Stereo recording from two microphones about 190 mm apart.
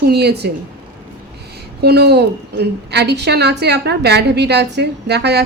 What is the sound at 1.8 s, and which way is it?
A woman's voice, 60° right (ahead or behind).